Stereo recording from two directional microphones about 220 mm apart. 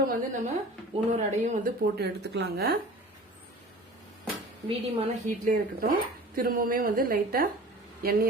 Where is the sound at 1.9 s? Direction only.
50° right (ahead or behind).